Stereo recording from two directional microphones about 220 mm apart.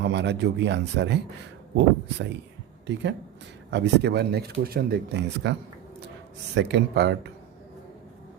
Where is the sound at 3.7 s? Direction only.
50° right (ahead or behind).